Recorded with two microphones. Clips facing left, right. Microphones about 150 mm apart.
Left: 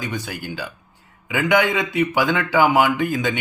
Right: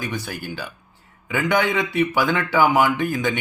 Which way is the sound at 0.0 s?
20° left (ahead or behind).